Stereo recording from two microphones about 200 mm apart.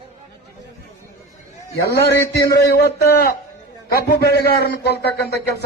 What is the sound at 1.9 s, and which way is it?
A man's voice, 50° left (ahead or behind).